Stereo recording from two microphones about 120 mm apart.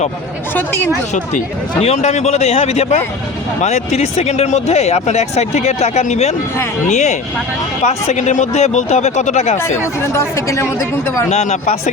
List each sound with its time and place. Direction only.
0.5 s speech: 20° left (ahead or behind)
1.8 s speech: 65° left (ahead or behind)
10.2 s speech: 25° left (ahead or behind)
11.3 s speech: 80° left